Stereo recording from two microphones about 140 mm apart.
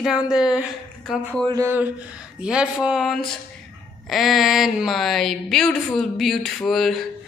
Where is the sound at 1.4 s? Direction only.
25° right (ahead or behind).